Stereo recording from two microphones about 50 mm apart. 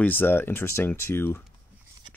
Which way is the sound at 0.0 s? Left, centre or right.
Left.